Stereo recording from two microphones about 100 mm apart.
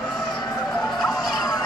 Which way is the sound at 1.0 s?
5° left (ahead or behind).